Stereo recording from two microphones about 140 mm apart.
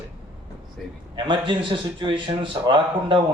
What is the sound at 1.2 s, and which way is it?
A man's voice, 35° right (ahead or behind).